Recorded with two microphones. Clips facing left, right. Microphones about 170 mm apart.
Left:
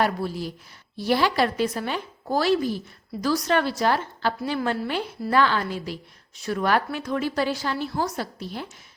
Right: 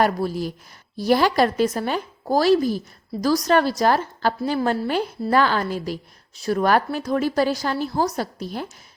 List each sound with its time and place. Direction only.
0.0 s a woman's voice: 45° right (ahead or behind)